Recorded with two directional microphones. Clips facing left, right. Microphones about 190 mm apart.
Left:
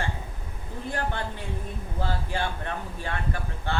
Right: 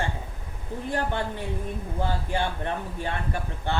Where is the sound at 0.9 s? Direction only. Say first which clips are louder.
Right 3 dB; 15° right (ahead or behind).